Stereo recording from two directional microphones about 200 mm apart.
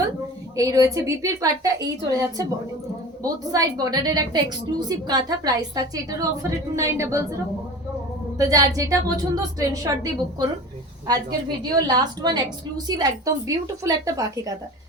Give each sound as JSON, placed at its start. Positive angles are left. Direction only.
{"t": 0.5, "sound": "a woman's voice", "side_deg": -15}
{"t": 8.4, "sound": "a woman's voice", "side_deg": -15}